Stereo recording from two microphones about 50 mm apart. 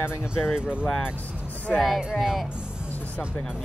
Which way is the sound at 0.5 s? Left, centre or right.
Right.